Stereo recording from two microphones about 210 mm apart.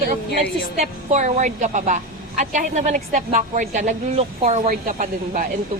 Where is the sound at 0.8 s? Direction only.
35° right (ahead or behind).